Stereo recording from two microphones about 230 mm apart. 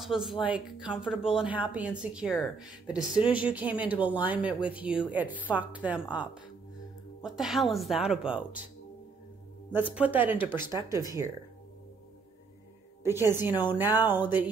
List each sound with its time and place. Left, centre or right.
0.0 s speech: centre
9.9 s speech: centre
13.0 s speech: centre